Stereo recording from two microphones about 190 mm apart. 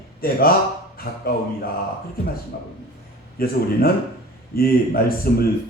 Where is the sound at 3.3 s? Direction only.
50° left (ahead or behind).